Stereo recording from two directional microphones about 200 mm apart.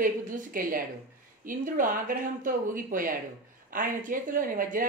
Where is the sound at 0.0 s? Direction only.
45° right (ahead or behind).